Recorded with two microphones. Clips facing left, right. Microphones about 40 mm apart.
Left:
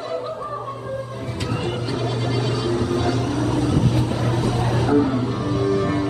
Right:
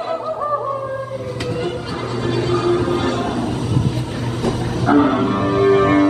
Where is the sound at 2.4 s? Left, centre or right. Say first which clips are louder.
Right 8 dB; right.